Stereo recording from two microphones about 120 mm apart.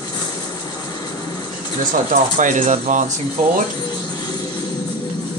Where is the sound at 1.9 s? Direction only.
90° right.